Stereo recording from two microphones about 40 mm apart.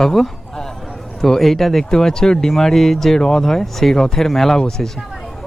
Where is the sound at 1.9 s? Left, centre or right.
Centre.